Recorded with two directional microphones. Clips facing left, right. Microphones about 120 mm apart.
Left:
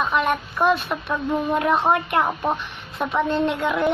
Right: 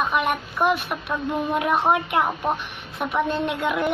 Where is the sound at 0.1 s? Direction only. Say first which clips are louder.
Left 2 dB; 15° right (ahead or behind).